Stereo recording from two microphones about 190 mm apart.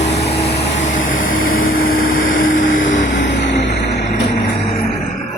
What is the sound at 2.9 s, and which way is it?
Vehicle, 65° left (ahead or behind).